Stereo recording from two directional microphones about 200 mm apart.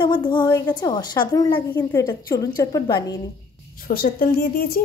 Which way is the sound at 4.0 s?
45° left (ahead or behind).